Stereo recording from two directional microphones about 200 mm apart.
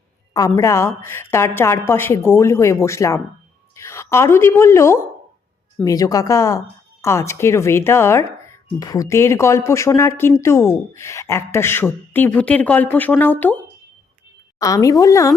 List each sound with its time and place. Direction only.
0.3 s speech: 15° left (ahead or behind)
14.6 s speech: 15° left (ahead or behind)